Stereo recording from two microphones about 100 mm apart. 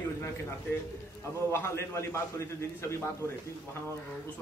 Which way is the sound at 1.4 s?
25° left (ahead or behind).